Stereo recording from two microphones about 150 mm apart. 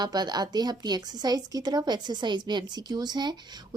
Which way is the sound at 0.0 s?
30° right (ahead or behind).